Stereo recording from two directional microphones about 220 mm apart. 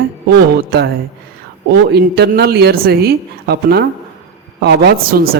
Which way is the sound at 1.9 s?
50° right (ahead or behind).